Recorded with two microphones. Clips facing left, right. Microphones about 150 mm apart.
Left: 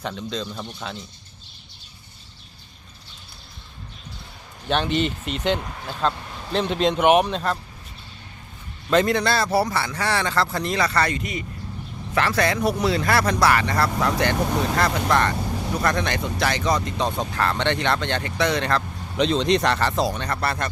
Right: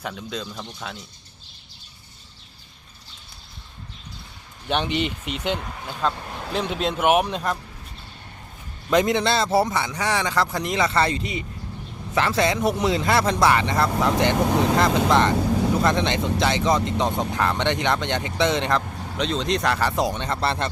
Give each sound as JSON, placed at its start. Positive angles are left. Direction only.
{"t": 0.2, "sound": "speech", "side_deg": -5}
{"t": 0.5, "sound": "speech", "side_deg": 5}
{"t": 4.7, "sound": "speech", "side_deg": -15}
{"t": 8.9, "sound": "speech", "side_deg": -15}
{"t": 12.3, "sound": "speech", "side_deg": -20}
{"t": 19.1, "sound": "speech", "side_deg": 0}